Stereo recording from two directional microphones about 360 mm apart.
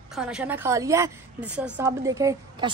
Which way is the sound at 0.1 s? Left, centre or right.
Centre.